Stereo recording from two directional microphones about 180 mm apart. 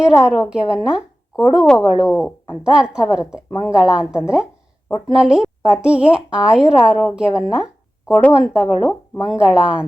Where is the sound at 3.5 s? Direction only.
15° left (ahead or behind).